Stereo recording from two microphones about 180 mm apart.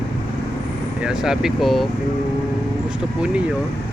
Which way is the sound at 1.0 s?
5° right (ahead or behind).